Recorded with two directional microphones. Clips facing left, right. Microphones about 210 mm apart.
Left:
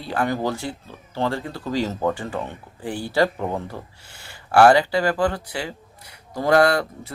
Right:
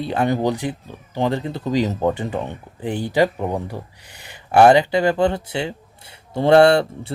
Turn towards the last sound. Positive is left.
turn(degrees=-30)  # may be behind; listen again after turning